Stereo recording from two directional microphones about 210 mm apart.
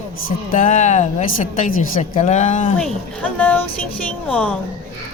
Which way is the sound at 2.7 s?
5° left (ahead or behind).